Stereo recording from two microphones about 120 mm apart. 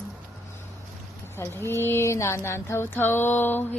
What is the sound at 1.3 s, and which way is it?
Speech, 20° left (ahead or behind).